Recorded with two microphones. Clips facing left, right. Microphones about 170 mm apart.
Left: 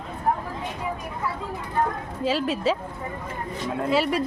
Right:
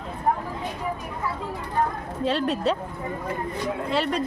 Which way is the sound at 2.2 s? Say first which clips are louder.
Even; centre (ahead or behind).